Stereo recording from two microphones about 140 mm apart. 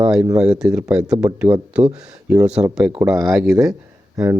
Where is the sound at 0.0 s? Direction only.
10° right (ahead or behind).